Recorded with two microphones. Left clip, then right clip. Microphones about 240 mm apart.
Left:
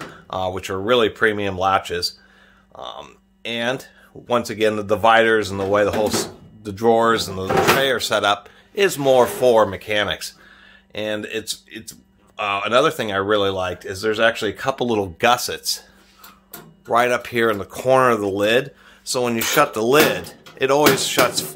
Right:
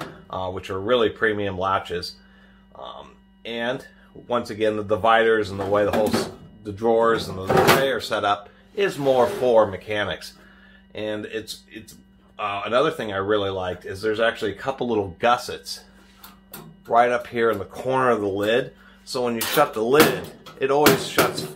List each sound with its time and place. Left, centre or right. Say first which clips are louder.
0.3 s speech: left 5 dB; left
16.8 s speech: left 1 dB; left